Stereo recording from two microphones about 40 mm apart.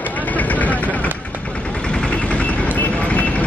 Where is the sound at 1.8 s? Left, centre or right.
Left.